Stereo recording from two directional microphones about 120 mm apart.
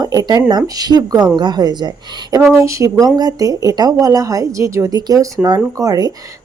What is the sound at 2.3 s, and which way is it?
Speech, 25° right (ahead or behind).